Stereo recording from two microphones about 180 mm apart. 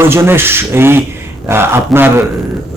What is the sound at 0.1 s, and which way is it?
Speech, 15° right (ahead or behind).